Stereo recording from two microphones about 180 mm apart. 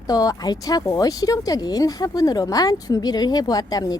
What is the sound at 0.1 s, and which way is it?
Speech, 20° left (ahead or behind).